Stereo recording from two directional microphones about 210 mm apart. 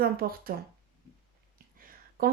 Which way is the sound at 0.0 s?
45° right (ahead or behind).